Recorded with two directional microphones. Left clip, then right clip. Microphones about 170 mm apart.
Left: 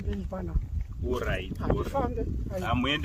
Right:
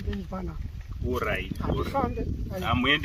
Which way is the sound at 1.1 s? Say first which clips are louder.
Right 3 dB; 35° left (ahead or behind).